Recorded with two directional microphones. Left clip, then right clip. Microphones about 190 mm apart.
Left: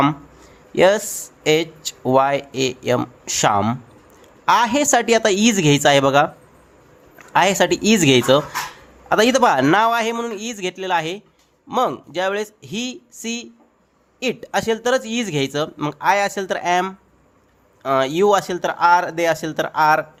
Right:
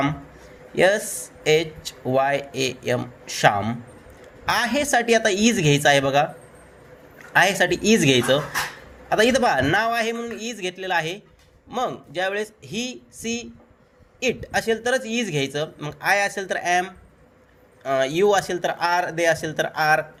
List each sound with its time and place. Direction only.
0.8 s speech: 25° left (ahead or behind)
7.3 s speech: 25° left (ahead or behind)
16.0 s speech: 20° left (ahead or behind)
17.9 s speech: 25° left (ahead or behind)